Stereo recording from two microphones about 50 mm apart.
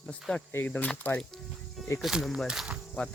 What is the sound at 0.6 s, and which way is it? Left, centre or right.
Speech, left.